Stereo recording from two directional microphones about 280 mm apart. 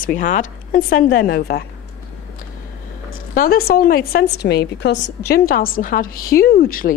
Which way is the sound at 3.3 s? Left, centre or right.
Left.